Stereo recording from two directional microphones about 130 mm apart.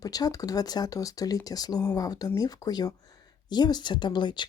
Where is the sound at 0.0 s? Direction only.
30° left (ahead or behind).